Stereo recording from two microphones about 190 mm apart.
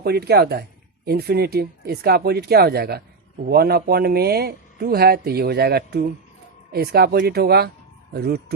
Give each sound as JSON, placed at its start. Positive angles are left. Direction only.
{"t": 0.0, "sound": "speech", "side_deg": -60}